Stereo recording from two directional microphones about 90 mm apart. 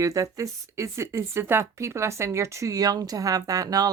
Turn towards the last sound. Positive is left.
turn(degrees=-45)  # may be behind; listen again after turning